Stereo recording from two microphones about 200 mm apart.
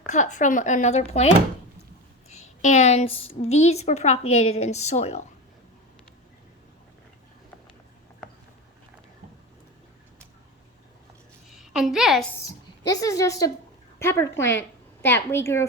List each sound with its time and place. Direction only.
0.1 s a woman's voice: 40° left (ahead or behind)
2.3 s a woman's voice: 35° left (ahead or behind)
11.4 s a sound: centre (ahead or behind)
12.4 s a woman's voice: 20° left (ahead or behind)